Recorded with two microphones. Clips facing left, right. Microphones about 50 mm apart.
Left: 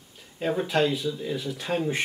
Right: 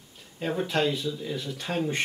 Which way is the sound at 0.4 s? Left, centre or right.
Centre.